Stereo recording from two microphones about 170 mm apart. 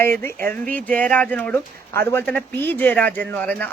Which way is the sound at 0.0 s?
10° left (ahead or behind).